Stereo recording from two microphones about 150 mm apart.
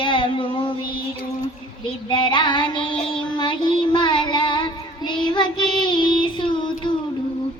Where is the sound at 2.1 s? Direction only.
30° left (ahead or behind).